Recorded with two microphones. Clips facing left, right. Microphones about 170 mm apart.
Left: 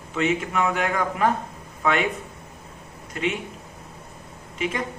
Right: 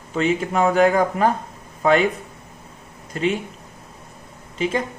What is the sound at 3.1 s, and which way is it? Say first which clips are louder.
Speech: right 4 dB; 35° right (ahead or behind).